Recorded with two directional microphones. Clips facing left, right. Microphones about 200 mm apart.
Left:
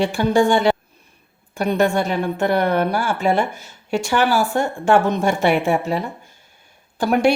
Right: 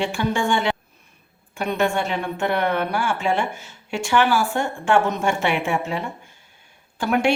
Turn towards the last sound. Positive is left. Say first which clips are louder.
# left 4 dB
turn(degrees=40)  # may be behind; listen again after turning